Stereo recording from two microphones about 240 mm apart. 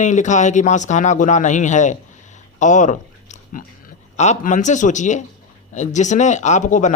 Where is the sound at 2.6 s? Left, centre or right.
Left.